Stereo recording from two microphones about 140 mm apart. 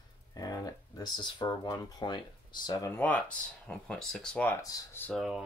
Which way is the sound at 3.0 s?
10° left (ahead or behind).